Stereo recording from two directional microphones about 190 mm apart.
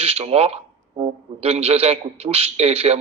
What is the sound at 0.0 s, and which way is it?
A man's voice, 30° right (ahead or behind).